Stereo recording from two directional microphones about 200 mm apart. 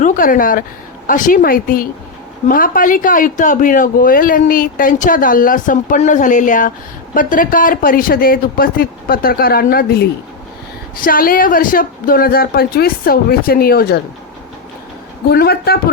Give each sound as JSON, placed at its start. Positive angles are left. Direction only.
{"t": 0.0, "sound": "speech", "side_deg": 40}
{"t": 15.3, "sound": "speech", "side_deg": 50}